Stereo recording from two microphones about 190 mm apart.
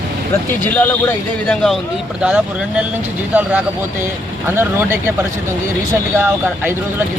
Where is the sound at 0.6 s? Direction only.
10° left (ahead or behind).